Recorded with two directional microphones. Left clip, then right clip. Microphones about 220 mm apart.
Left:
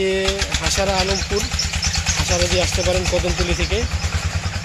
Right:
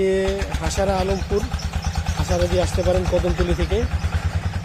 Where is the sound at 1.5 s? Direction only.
40° right (ahead or behind).